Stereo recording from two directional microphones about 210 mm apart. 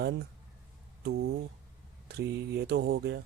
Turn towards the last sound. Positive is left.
turn(degrees=-50)  # may be behind; listen again after turning